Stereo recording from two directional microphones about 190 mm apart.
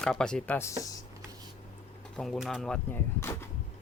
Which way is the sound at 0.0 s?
5° left (ahead or behind).